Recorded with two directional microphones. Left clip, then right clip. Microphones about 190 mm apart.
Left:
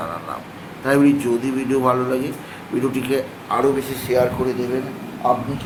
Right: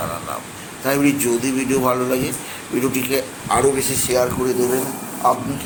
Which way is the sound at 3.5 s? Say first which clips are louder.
Right 2 dB; 15° right (ahead or behind).